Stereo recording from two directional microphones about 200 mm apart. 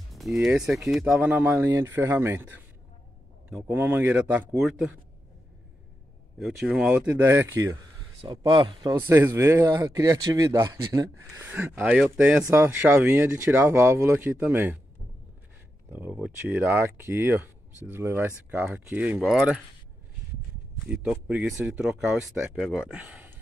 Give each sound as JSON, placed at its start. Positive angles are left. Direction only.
{"t": 0.1, "sound": "speech", "side_deg": 0}
{"t": 6.4, "sound": "speech", "side_deg": 0}
{"t": 9.0, "sound": "speech", "side_deg": -10}
{"t": 15.9, "sound": "speech", "side_deg": -10}
{"t": 20.9, "sound": "speech", "side_deg": -5}